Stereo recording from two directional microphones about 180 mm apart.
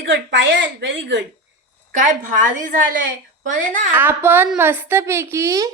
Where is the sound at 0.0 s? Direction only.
85° right.